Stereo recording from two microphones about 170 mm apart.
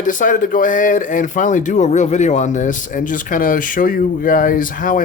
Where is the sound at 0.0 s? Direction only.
50° left (ahead or behind).